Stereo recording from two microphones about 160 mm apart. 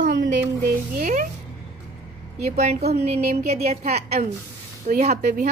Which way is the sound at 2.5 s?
40° right (ahead or behind).